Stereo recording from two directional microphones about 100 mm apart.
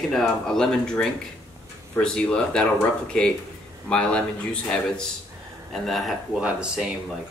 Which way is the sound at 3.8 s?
10° left (ahead or behind).